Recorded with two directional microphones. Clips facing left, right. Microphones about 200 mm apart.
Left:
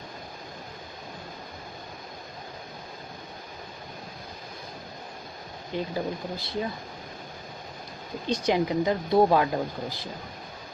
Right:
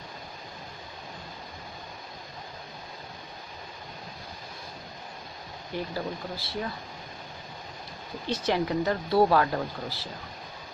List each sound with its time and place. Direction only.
5.9 s speech: 15° left (ahead or behind)
8.3 s speech: 15° left (ahead or behind)